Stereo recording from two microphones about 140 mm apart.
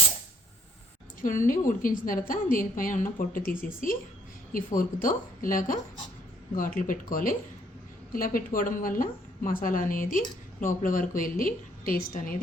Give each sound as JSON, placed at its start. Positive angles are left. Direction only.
{"t": 1.2, "sound": "a woman's voice", "side_deg": 70}